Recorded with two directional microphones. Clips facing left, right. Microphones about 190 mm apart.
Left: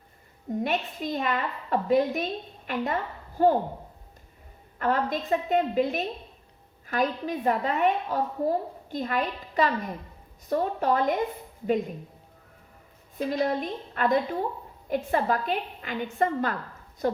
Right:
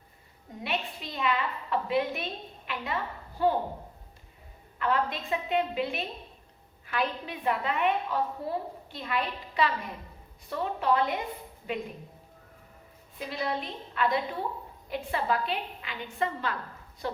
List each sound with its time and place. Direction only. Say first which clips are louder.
0.5 s a woman's voice: left 6 dB; 45° left (ahead or behind)
4.8 s a woman's voice: left 3 dB; 45° left (ahead or behind)
13.1 s a woman's voice: left 7 dB; 45° left (ahead or behind)